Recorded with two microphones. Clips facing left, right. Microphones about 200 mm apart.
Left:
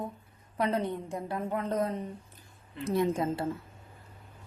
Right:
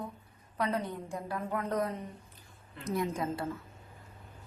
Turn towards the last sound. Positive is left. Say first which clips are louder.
# left 4 dB
turn(degrees=30)  # may be behind; listen again after turning